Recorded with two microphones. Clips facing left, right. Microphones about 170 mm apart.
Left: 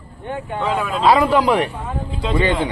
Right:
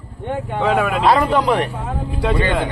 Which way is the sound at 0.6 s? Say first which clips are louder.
Right 4 dB; 70° right (ahead or behind).